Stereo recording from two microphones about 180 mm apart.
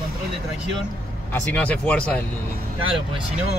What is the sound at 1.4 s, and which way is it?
Speech, 10° left (ahead or behind).